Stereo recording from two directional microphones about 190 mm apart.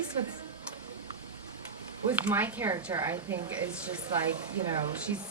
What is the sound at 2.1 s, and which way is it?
Speech, 10° right (ahead or behind).